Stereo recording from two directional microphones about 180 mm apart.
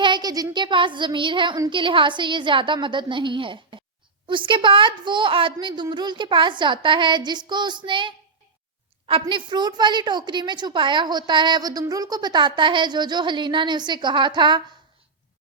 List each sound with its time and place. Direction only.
0.0 s a woman's voice: 25° right (ahead or behind)
9.2 s a woman's voice: 25° right (ahead or behind)